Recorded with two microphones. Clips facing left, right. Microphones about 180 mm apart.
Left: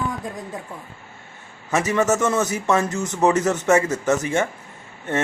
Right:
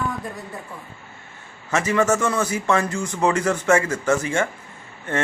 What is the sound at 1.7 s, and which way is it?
A man's voice, 20° left (ahead or behind).